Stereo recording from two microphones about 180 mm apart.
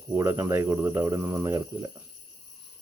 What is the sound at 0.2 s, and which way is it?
Speech, 15° right (ahead or behind).